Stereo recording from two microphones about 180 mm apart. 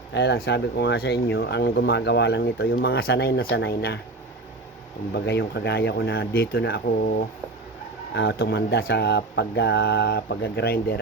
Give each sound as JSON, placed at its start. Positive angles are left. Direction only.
{"t": 0.1, "sound": "speech", "side_deg": 70}
{"t": 5.1, "sound": "speech", "side_deg": 70}
{"t": 8.1, "sound": "speech", "side_deg": 65}